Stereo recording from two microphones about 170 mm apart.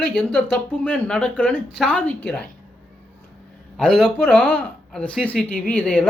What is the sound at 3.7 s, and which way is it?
Speech, centre (ahead or behind).